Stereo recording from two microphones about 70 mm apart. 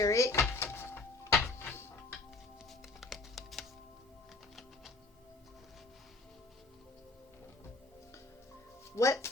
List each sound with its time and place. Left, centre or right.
0.0 s speech: left
0.4 s music: left
3.0 s music: centre
9.0 s music: left